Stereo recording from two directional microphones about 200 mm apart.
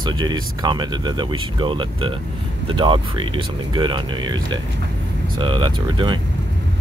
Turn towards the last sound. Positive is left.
turn(degrees=-25)  # may be behind; listen again after turning